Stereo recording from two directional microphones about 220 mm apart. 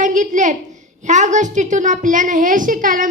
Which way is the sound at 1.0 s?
35° right (ahead or behind).